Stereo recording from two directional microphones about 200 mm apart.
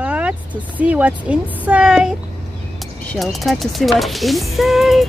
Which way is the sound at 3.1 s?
Centre (ahead or behind).